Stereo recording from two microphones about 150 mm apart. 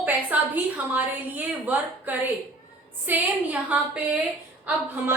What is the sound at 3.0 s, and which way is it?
A woman's voice, 10° right (ahead or behind).